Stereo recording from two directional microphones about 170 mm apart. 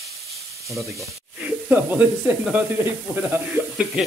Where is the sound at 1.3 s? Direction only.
5° right (ahead or behind).